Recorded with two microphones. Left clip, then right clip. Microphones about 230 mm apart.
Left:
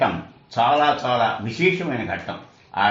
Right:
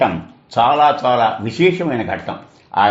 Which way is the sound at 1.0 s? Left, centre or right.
Right.